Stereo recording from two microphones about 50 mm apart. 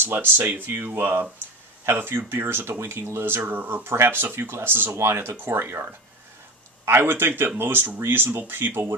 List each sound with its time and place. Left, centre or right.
0.0 s speech: right
3.8 s speech: right
4.9 s speech: right
7.0 s speech: right